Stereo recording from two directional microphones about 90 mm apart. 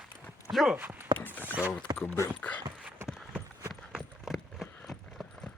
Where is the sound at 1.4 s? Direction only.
15° right (ahead or behind).